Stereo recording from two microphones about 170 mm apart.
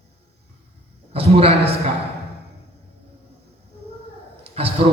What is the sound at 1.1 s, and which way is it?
Speech, 35° right (ahead or behind).